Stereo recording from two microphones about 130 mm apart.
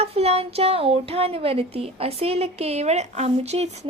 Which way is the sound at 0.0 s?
55° right (ahead or behind).